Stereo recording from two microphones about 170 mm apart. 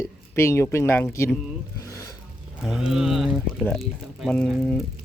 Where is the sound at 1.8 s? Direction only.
20° left (ahead or behind).